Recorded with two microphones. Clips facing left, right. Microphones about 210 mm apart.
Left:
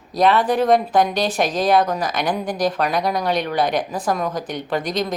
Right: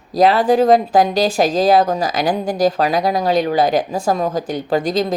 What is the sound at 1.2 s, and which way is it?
Speech, 30° right (ahead or behind).